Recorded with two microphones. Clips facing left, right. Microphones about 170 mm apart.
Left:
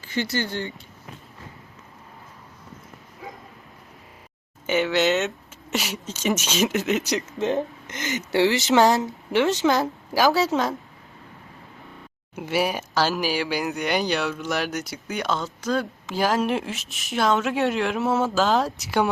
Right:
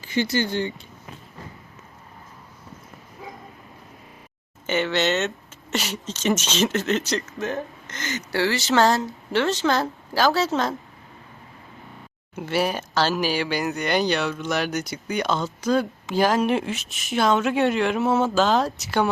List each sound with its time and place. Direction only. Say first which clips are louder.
0.0 s speech: right 3 dB; 15° right (ahead or behind)
4.6 s a woman's voice: left 2 dB; 5° left (ahead or behind)
12.3 s speech: even; 10° left (ahead or behind)